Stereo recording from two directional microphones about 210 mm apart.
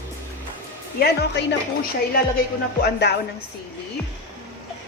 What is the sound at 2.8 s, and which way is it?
Speech, 55° left (ahead or behind).